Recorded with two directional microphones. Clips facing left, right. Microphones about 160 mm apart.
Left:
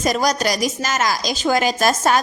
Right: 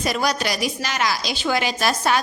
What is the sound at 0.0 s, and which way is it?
A woman's voice, 45° left (ahead or behind).